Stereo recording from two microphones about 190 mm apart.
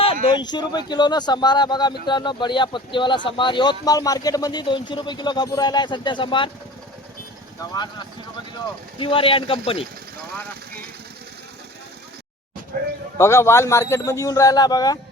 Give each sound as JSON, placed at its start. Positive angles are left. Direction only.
{"t": 0.0, "sound": "a man's voice", "side_deg": 30}
{"t": 7.6, "sound": "a man's voice", "side_deg": 20}
{"t": 13.1, "sound": "a man's voice", "side_deg": 15}